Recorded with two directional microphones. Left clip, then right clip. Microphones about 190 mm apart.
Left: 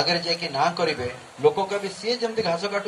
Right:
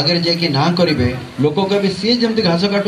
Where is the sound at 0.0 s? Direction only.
50° left (ahead or behind).